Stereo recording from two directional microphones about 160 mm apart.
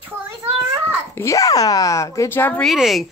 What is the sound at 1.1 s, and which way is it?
Speech, 20° left (ahead or behind).